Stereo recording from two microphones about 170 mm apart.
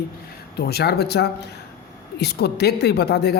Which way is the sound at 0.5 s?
70° left (ahead or behind).